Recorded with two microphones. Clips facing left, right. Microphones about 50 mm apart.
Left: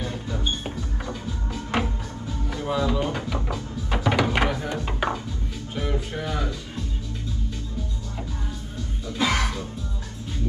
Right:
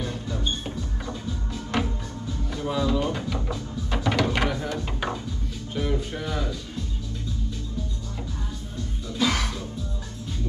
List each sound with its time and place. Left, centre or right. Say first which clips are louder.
0.0 s music: left 1 dB; centre
9.1 s music: left 1 dB; centre